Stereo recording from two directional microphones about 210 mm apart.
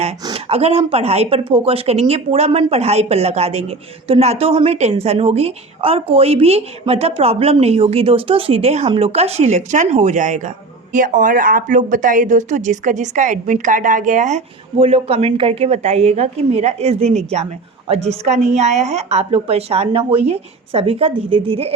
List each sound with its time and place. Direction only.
0.3 s a woman's voice: 30° right (ahead or behind)